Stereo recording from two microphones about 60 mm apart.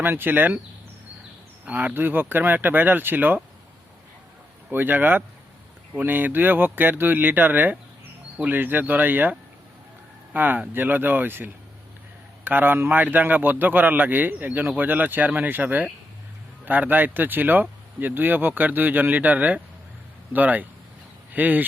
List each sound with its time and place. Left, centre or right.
0.0 s speech: right
1.6 s speech: right
4.7 s speech: right
10.3 s speech: right